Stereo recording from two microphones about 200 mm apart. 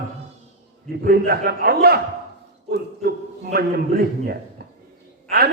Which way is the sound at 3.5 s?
50° right (ahead or behind).